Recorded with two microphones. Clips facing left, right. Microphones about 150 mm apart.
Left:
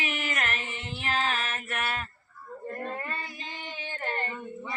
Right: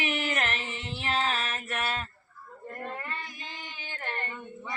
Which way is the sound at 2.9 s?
30° left (ahead or behind).